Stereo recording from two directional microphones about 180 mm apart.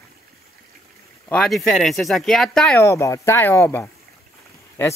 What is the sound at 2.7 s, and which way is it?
Speech, 15° left (ahead or behind).